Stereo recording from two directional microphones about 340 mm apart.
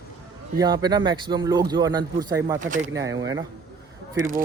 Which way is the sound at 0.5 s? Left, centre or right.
Centre.